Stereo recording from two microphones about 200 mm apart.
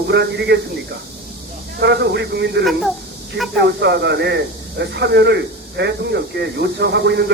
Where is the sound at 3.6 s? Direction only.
60° right (ahead or behind).